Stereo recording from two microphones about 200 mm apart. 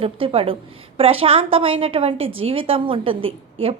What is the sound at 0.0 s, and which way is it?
A woman's voice, 30° right (ahead or behind).